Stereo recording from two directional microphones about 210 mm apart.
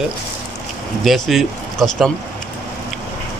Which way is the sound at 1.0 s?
Centre (ahead or behind).